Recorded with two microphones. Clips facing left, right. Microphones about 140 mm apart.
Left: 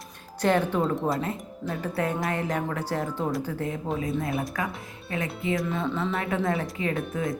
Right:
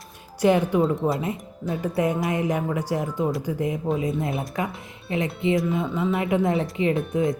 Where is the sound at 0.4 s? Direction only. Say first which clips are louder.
Right 4 dB; 10° right (ahead or behind).